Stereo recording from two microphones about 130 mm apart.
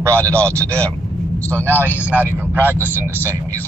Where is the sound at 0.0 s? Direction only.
20° right (ahead or behind).